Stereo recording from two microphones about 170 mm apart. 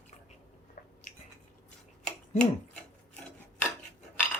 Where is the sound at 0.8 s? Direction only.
60° left (ahead or behind).